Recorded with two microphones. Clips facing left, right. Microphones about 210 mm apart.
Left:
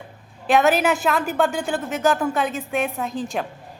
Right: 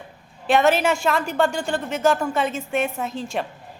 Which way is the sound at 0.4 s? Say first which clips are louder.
Even; centre (ahead or behind).